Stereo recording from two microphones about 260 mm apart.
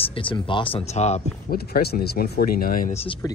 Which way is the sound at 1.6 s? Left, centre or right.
Left.